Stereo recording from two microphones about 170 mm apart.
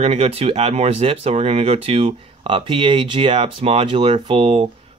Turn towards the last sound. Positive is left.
turn(degrees=-35)  # may be behind; listen again after turning